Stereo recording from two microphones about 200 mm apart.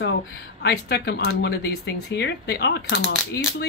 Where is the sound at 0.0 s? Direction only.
60° left (ahead or behind).